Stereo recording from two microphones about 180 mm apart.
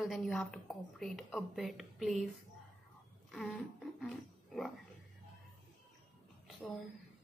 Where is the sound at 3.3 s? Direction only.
Centre (ahead or behind).